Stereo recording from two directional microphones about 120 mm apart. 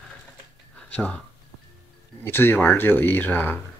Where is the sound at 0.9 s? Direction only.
10° left (ahead or behind).